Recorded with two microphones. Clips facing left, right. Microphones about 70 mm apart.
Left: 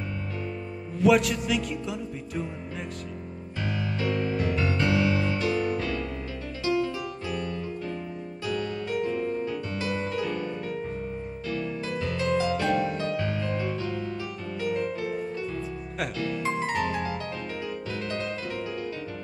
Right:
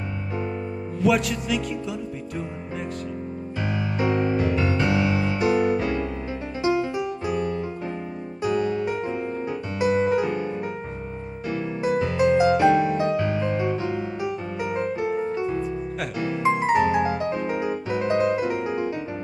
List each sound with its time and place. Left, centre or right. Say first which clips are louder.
0.9 s music: left 1 dB; centre
4.0 s music: right 6 dB; right